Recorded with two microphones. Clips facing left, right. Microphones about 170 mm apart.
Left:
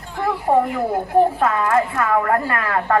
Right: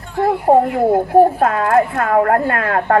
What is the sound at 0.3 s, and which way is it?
A woman's voice, 45° right (ahead or behind).